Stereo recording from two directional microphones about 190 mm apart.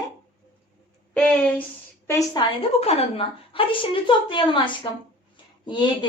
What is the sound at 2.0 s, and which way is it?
A woman's voice, 25° left (ahead or behind).